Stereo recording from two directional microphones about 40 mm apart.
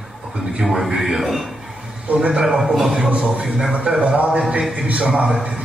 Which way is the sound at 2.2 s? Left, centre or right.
Centre.